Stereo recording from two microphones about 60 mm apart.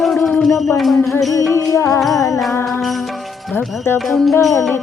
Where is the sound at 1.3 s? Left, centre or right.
Left.